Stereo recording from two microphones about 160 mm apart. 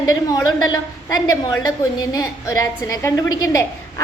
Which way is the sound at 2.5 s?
20° left (ahead or behind).